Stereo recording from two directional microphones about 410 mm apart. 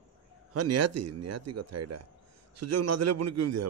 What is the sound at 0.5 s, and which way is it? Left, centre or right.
A man's voice, right.